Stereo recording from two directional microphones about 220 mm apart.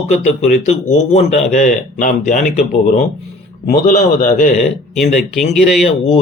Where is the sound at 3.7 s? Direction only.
45° left (ahead or behind).